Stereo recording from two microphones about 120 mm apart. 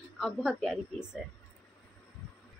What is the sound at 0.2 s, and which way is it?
A woman's voice, centre (ahead or behind).